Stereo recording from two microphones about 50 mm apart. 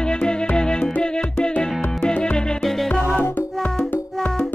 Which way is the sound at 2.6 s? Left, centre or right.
Centre.